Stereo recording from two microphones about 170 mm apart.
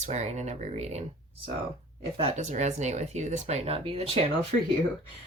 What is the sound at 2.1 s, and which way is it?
Speech, 40° right (ahead or behind).